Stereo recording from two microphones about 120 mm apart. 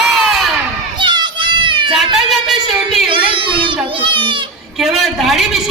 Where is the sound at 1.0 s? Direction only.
40° right (ahead or behind).